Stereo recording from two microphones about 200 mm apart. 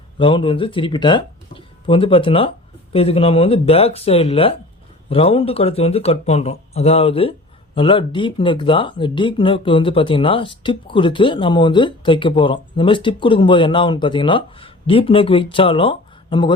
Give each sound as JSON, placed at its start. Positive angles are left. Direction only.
{"t": 0.2, "sound": "speech", "side_deg": 25}